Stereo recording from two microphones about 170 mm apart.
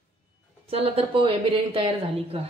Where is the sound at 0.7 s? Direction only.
35° right (ahead or behind).